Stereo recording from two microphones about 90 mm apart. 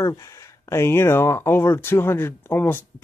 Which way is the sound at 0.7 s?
30° left (ahead or behind).